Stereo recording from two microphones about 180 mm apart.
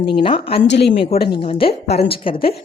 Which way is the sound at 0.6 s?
75° left (ahead or behind).